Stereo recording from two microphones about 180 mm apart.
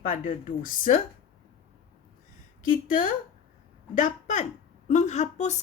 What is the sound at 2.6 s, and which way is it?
A woman's voice, 50° left (ahead or behind).